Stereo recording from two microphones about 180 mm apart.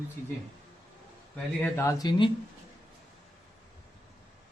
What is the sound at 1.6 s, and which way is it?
Speech, 15° left (ahead or behind).